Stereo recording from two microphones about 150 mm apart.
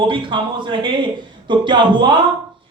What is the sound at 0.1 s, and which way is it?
Speech, 35° right (ahead or behind).